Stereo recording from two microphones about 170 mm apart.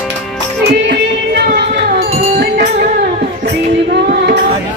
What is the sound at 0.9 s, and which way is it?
Music, 70° right (ahead or behind).